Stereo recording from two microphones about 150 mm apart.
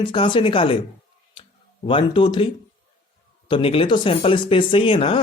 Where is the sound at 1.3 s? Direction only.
35° left (ahead or behind).